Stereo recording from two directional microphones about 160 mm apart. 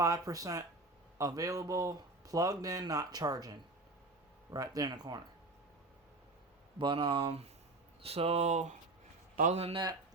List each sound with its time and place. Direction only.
0.0 s speech: 20° right (ahead or behind)
6.7 s speech: 30° right (ahead or behind)